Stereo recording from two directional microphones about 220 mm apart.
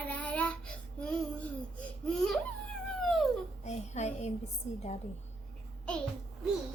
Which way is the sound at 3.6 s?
30° left (ahead or behind).